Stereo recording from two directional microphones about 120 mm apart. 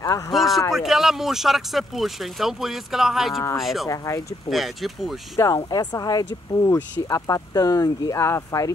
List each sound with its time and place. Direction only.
0.3 s a sound: centre (ahead or behind)
0.7 s speech: 5° right (ahead or behind)
5.7 s speech: 35° left (ahead or behind)